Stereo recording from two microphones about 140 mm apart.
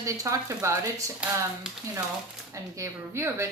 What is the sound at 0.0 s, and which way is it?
Speech, 25° right (ahead or behind).